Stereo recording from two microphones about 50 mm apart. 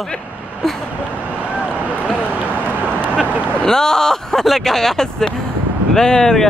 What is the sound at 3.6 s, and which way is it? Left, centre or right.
Speech, centre.